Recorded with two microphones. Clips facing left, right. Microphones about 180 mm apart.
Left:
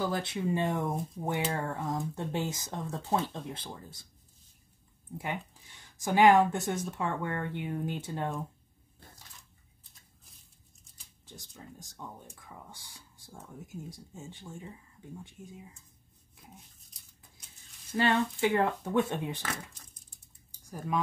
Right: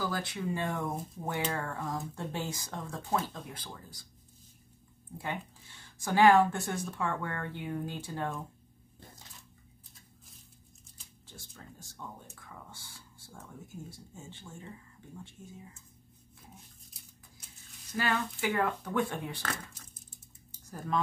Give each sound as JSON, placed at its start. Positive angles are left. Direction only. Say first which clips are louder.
{"t": 0.0, "sound": "speech", "louder": "left 3 dB", "side_deg": 25}
{"t": 5.1, "sound": "speech", "louder": "left 1 dB", "side_deg": 15}
{"t": 11.2, "sound": "speech", "louder": "left 3 dB", "side_deg": 20}
{"t": 12.4, "sound": "a sound", "louder": "left 1 dB", "side_deg": 15}
{"t": 13.8, "sound": "speech", "louder": "left 3 dB", "side_deg": 15}
{"t": 17.9, "sound": "speech", "louder": "left 5 dB", "side_deg": 25}
{"t": 19.4, "sound": "speech", "louder": "even", "side_deg": -5}
{"t": 20.7, "sound": "speech", "louder": "left 1 dB", "side_deg": 10}